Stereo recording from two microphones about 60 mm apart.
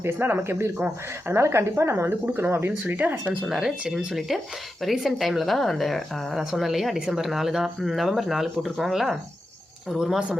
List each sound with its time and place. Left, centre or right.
0.0 s speech: right
2.8 s speech: right
3.4 s speech: centre